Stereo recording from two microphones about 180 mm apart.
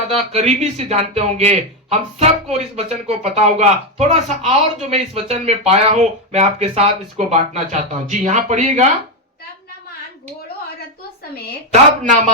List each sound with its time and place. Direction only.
0.1 s a man's voice: 35° right (ahead or behind)
11.7 s speech: 45° right (ahead or behind)